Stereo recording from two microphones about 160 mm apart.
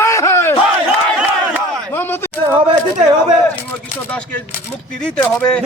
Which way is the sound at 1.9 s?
15° left (ahead or behind).